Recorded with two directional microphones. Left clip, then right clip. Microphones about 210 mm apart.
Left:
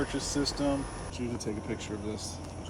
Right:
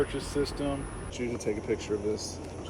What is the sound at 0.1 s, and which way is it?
Speech, 55° left (ahead or behind).